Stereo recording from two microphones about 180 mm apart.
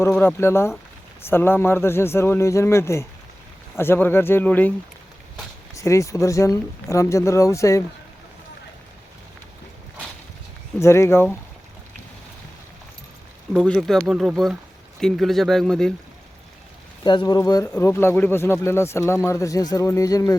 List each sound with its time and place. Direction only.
0.1 s speech: 10° left (ahead or behind)
5.7 s speech: 15° left (ahead or behind)
10.8 s speech: 15° left (ahead or behind)
13.5 s speech: 5° left (ahead or behind)
17.0 s speech: 25° left (ahead or behind)